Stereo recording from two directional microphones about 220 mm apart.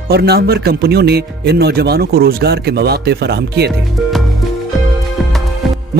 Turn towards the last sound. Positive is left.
turn(degrees=0)  # may be behind; listen again after turning